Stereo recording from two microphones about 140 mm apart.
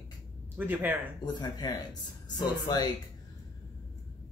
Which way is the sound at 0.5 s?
15° right (ahead or behind).